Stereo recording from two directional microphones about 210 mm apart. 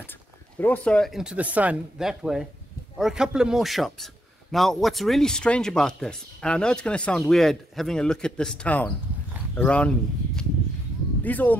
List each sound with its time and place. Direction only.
0.6 s a man's voice: 5° left (ahead or behind)